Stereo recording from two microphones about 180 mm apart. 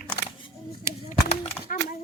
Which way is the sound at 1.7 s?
50° left (ahead or behind).